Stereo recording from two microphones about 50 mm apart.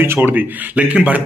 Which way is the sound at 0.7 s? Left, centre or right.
Right.